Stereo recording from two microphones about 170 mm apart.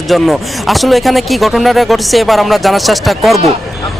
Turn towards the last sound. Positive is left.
turn(degrees=0)  # may be behind; listen again after turning